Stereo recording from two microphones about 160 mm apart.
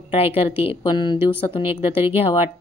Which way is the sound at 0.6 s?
30° left (ahead or behind).